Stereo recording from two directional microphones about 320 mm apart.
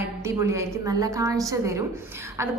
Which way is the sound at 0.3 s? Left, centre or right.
Centre.